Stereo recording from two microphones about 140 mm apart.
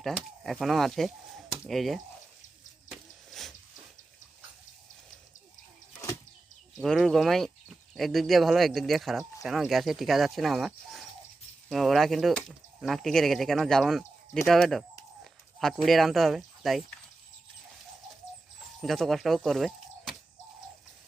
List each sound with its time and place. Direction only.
0.0 s speech: centre (ahead or behind)
2.9 s a sound: centre (ahead or behind)
6.7 s speech: centre (ahead or behind)
18.8 s speech: centre (ahead or behind)